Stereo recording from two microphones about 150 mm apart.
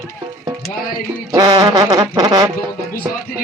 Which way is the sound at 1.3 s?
30° right (ahead or behind).